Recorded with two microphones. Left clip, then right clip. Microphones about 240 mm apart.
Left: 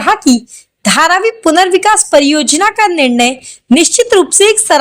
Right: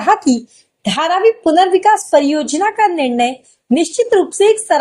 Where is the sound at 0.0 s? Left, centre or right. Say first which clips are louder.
Left 3 dB; left.